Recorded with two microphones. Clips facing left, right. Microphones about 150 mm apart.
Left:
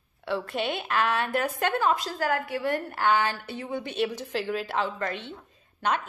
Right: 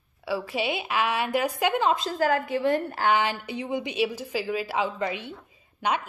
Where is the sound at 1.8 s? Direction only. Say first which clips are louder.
Right 2 dB; 20° right (ahead or behind).